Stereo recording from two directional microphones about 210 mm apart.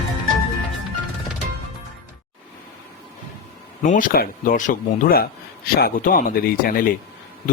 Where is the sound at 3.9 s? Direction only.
40° left (ahead or behind).